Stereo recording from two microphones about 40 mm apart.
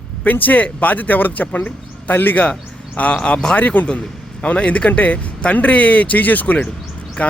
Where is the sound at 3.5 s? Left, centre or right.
Left.